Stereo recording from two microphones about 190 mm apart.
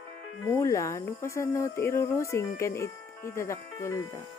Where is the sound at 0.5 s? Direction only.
15° left (ahead or behind).